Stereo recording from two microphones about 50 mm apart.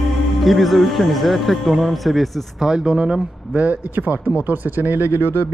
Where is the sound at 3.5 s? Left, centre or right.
Right.